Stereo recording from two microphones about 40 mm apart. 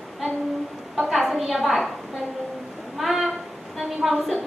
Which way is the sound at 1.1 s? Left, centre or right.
Centre.